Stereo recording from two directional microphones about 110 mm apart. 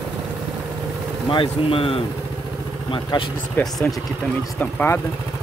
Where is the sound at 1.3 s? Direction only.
55° left (ahead or behind).